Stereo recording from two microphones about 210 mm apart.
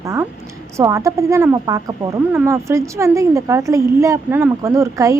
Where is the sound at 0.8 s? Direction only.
15° right (ahead or behind).